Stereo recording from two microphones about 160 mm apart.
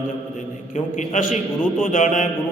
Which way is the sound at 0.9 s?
55° left (ahead or behind).